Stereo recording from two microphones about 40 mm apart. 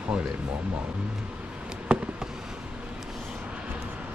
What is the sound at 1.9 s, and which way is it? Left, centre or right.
Fireworks, right.